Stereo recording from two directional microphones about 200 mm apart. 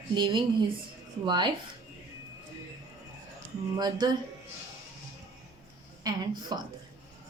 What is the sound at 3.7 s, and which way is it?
Speech, 20° right (ahead or behind).